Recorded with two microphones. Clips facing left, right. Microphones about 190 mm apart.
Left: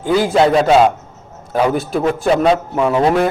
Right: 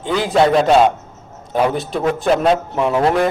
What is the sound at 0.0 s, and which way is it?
A man's voice, 5° left (ahead or behind).